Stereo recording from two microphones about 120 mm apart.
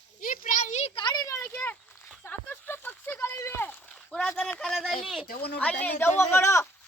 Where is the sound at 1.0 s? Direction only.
40° left (ahead or behind).